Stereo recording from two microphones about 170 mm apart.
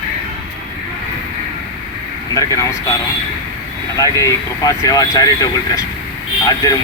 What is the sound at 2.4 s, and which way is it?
Speech, 20° left (ahead or behind).